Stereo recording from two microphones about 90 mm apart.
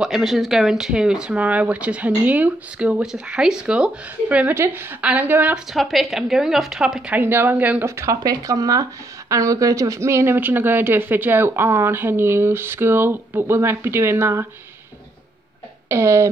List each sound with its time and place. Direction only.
0.0 s speech: centre (ahead or behind); by 5.6 s 20° right (ahead or behind)
5.7 s a woman's voice: centre (ahead or behind)
7.2 s speech: 25° right (ahead or behind)
7.8 s speech: 30° right (ahead or behind)
15.9 s speech: 30° right (ahead or behind)